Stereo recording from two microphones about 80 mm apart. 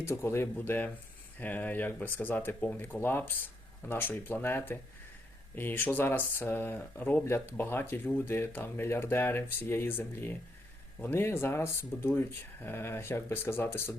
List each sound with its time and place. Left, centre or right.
0.0 s speech: left